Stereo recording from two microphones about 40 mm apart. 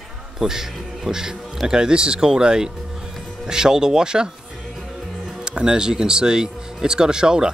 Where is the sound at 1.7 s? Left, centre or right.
Right.